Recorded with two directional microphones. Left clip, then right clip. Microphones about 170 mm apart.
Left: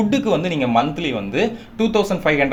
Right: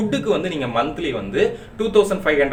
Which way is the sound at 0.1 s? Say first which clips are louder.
Left 2 dB; 35° left (ahead or behind).